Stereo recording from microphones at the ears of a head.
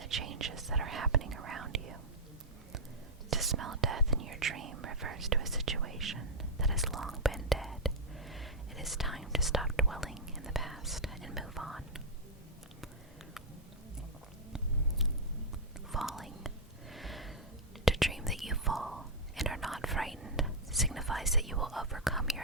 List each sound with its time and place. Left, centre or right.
0.0 s whispering: right
3.2 s whispering: right
7.2 s whispering: centre
15.9 s whispering: centre
16.9 s a sound: centre
17.8 s whispering: centre